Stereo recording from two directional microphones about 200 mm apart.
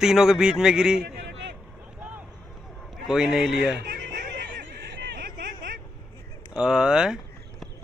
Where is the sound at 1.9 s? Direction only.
5° right (ahead or behind).